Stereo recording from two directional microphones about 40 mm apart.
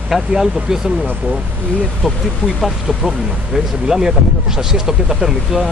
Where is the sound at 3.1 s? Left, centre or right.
Centre.